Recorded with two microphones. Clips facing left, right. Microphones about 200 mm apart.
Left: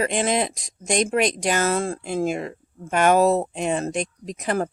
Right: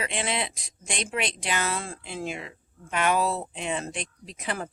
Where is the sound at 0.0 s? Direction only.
45° left (ahead or behind).